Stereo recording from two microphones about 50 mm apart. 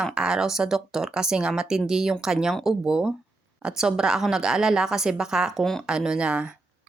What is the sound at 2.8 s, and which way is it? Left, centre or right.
A woman's voice, centre.